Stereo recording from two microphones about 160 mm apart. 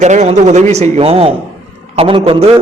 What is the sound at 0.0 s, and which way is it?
A man's voice, 45° right (ahead or behind).